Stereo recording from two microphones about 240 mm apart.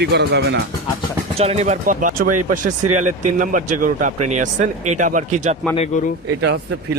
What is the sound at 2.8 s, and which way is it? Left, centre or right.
Speech, right.